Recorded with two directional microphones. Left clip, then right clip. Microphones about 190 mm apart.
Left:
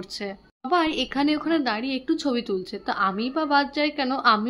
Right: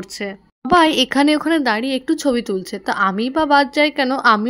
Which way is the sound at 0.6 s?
50° right (ahead or behind).